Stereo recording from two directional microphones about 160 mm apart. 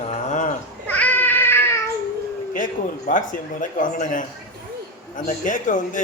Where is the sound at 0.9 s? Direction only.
10° left (ahead or behind).